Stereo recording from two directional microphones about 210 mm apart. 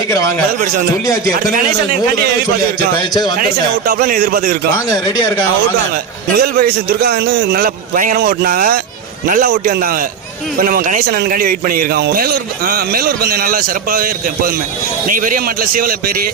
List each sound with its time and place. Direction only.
0.1 s speech: 15° left (ahead or behind)
1.3 s a man's voice: 45° right (ahead or behind)
3.0 s a man's voice: 20° left (ahead or behind)
3.8 s a man's voice: 45° right (ahead or behind)
4.9 s speech: 15° left (ahead or behind)
6.3 s a man's voice: 45° right (ahead or behind)